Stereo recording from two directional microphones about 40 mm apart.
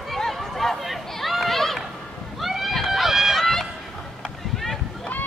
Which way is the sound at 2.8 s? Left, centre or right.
Centre.